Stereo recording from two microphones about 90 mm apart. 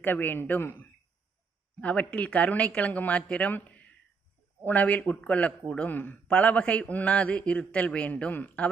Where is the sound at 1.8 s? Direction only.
15° left (ahead or behind).